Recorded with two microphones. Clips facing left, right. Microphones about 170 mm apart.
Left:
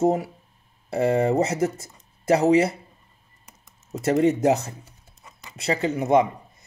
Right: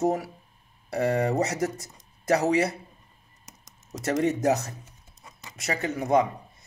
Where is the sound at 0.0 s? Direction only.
25° left (ahead or behind).